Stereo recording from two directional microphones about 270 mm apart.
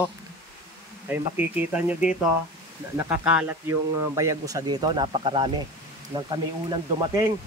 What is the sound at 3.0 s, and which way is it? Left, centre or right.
Speech, centre.